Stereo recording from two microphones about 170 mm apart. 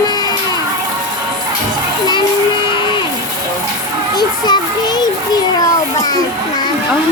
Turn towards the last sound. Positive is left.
turn(degrees=20)  # may be behind; listen again after turning